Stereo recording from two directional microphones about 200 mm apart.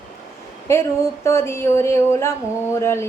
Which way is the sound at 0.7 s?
15° left (ahead or behind).